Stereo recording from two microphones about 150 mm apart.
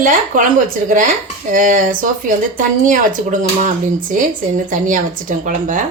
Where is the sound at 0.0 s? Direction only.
65° right (ahead or behind).